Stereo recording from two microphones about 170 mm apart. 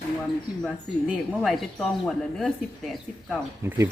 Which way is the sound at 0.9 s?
Centre (ahead or behind).